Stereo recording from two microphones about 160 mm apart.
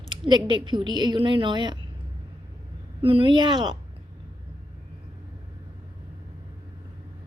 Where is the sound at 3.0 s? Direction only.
35° right (ahead or behind).